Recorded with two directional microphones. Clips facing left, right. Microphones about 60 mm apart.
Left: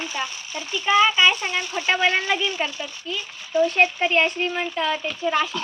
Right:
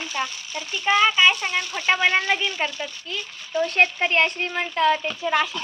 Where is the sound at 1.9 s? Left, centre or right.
Right.